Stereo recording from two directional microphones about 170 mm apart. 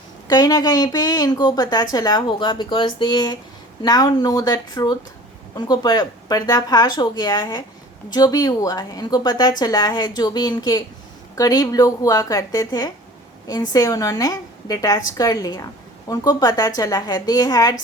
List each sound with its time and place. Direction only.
0.3 s a woman's voice: 25° left (ahead or behind)